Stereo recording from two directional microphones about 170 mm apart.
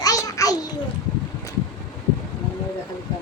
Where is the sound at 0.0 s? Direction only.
20° left (ahead or behind).